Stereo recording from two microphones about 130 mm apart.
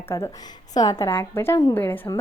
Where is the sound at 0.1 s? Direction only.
25° left (ahead or behind).